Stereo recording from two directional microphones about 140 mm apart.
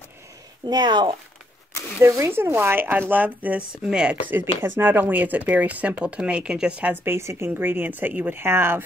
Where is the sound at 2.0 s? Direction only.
20° right (ahead or behind).